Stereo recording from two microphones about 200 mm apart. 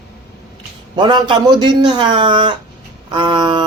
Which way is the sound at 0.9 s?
20° right (ahead or behind).